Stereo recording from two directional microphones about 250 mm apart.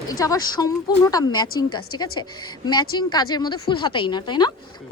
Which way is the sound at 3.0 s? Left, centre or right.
Centre.